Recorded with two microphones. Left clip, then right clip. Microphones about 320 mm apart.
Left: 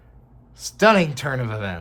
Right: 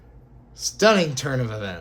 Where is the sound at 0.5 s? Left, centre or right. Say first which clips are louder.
Left 2 dB; left.